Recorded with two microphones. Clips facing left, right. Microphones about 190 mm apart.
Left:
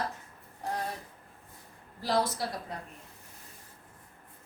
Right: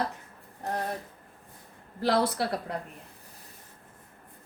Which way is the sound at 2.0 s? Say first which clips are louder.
Right 4 dB; 65° right (ahead or behind).